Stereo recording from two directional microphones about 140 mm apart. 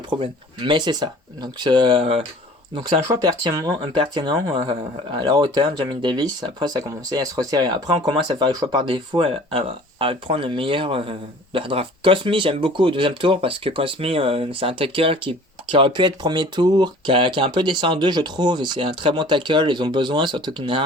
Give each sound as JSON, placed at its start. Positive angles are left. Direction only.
{"t": 0.1, "sound": "speech", "side_deg": -35}
{"t": 3.1, "sound": "speech", "side_deg": -25}